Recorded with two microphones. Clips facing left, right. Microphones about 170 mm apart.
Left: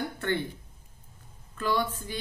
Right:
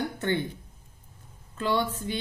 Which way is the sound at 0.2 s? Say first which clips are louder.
Right 1 dB; 20° right (ahead or behind).